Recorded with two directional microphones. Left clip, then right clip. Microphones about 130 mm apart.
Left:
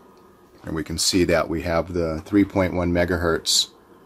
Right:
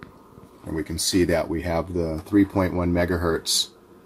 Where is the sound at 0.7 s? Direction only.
20° left (ahead or behind).